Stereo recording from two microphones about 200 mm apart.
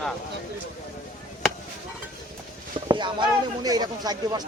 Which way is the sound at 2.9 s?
25° right (ahead or behind).